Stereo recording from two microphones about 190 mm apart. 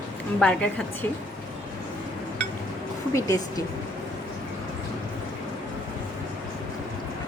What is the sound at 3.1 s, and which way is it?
Speech, 15° left (ahead or behind).